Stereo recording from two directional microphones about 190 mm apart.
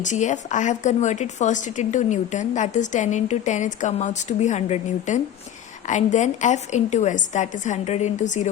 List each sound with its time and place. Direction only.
0.0 s a woman's voice: 40° left (ahead or behind)